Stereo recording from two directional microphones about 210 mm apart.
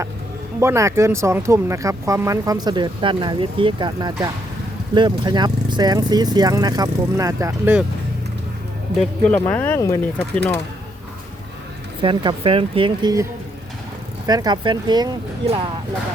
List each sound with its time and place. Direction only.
0.6 s speech: 15° right (ahead or behind)
9.5 s speech: 10° left (ahead or behind)
12.0 s speech: 25° right (ahead or behind)
14.3 s speech: 20° right (ahead or behind)